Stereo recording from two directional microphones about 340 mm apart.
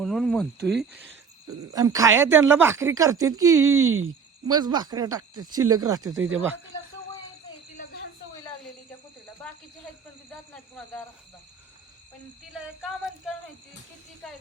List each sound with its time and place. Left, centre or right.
0.0 s speech: centre
3.9 s a sound: right
4.5 s speech: centre
7.8 s a sound: left
10.5 s speech: centre
14.2 s speech: centre